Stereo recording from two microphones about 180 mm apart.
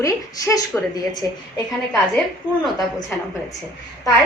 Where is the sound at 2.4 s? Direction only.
5° right (ahead or behind).